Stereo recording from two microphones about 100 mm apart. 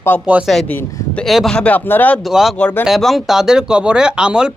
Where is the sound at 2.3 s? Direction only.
Centre (ahead or behind).